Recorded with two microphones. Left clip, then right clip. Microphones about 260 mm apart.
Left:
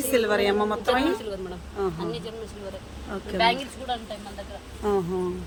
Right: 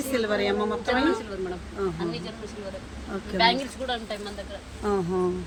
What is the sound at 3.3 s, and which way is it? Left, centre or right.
Speech, centre.